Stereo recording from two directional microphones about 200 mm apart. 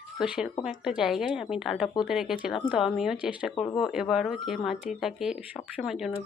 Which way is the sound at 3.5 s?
25° left (ahead or behind).